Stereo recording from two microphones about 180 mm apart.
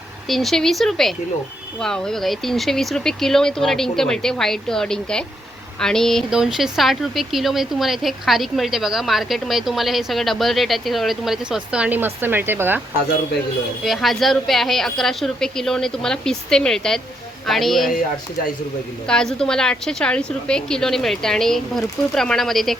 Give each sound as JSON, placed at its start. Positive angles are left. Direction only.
{"t": 0.3, "sound": "speech", "side_deg": 0}
{"t": 13.8, "sound": "speech", "side_deg": 0}
{"t": 19.0, "sound": "speech", "side_deg": 5}